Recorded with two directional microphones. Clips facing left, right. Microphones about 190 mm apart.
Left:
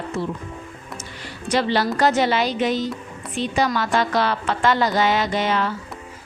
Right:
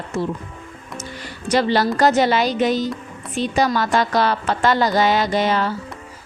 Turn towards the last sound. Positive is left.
turn(degrees=-35)  # may be behind; listen again after turning